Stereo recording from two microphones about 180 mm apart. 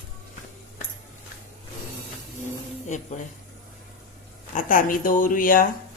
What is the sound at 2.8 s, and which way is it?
Speech, 40° left (ahead or behind).